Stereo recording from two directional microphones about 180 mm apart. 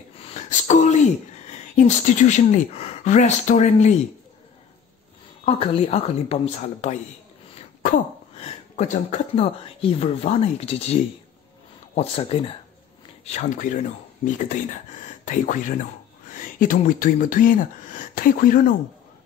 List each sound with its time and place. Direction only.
0.2 s a sound: 40° left (ahead or behind)
1.8 s speech: 40° left (ahead or behind)
5.4 s speech: 30° left (ahead or behind)
8.4 s speech: 40° left (ahead or behind)